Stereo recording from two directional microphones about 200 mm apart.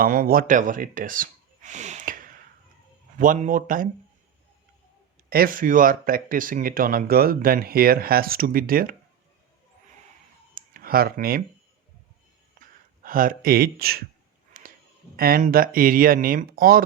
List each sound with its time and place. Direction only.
0.0 s speech: 45° right (ahead or behind)
5.3 s speech: 45° right (ahead or behind)
10.5 s clicking: 45° right (ahead or behind)
12.5 s a sound: 45° right (ahead or behind)
15.1 s speech: 45° right (ahead or behind)